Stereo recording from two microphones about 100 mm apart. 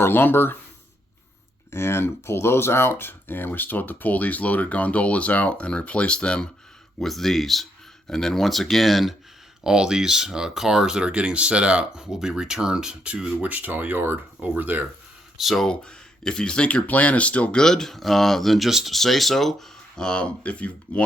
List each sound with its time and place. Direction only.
0.0 s speech: 20° left (ahead or behind)
1.7 s speech: 25° left (ahead or behind); by 14.8 s 20° right (ahead or behind)
15.4 s speech: centre (ahead or behind)